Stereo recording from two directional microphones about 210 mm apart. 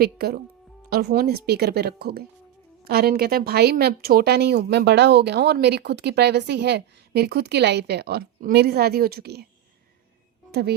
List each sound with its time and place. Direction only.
0.0 s speech: 45° right (ahead or behind)
10.5 s speech: 50° right (ahead or behind)